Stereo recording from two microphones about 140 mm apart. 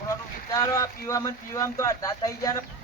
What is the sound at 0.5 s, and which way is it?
Speech, 20° left (ahead or behind).